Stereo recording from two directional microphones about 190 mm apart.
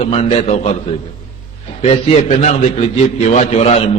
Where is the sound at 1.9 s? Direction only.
35° left (ahead or behind).